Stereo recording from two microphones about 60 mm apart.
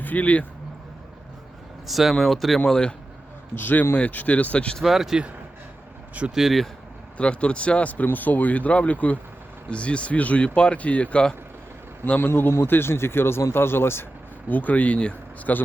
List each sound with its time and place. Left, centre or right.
0.0 s speech: left
1.9 s speech: centre
2.6 s speech: centre
3.5 s speech: left
4.8 s speech: centre
6.3 s speech: centre
7.2 s speech: centre
12.2 s speech: left
14.5 s speech: left